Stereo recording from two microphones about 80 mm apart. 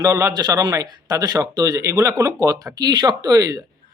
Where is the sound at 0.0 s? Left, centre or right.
Right.